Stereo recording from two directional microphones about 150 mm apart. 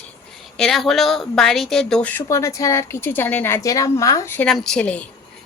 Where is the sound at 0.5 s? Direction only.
5° left (ahead or behind).